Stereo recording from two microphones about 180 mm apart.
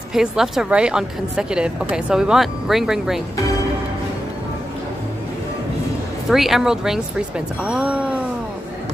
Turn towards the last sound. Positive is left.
turn(degrees=-5)  # may be behind; listen again after turning